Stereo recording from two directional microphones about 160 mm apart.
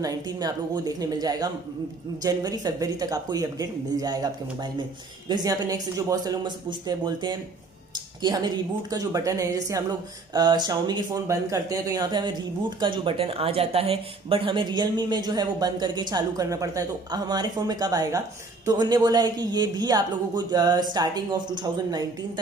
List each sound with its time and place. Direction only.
0.0 s a woman's voice: 25° right (ahead or behind)
5.3 s a woman's voice: 25° right (ahead or behind)